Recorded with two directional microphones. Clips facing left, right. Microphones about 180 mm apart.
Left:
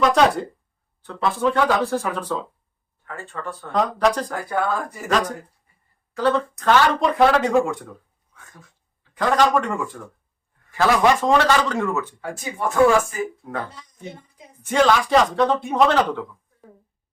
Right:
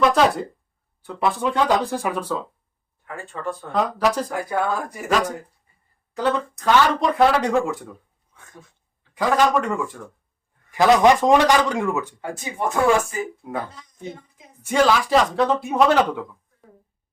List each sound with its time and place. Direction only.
0.0 s speech: 5° right (ahead or behind)
1.0 s speech: 15° right (ahead or behind)
3.3 s speech: 15° right (ahead or behind)
3.7 s speech: 5° right (ahead or behind)
6.1 s speech: 15° right (ahead or behind)
7.1 s speech: centre (ahead or behind)
9.1 s speech: 5° right (ahead or behind)
10.7 s speech: 15° right (ahead or behind)
13.4 s speech: 10° right (ahead or behind)